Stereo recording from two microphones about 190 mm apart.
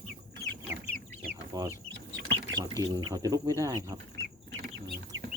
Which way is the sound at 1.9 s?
70° right (ahead or behind).